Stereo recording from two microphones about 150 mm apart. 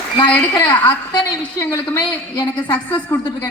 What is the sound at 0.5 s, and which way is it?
A woman's voice, 25° left (ahead or behind).